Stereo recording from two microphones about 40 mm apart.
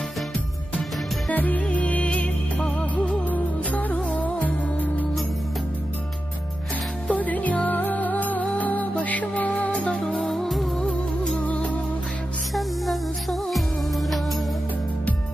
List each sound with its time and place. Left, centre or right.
1.3 s music: left
7.1 s music: left
10.2 s music: centre
11.4 s music: left
12.5 s music: centre